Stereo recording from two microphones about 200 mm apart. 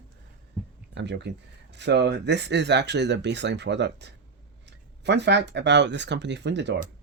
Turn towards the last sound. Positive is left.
turn(degrees=-60)  # may be behind; listen again after turning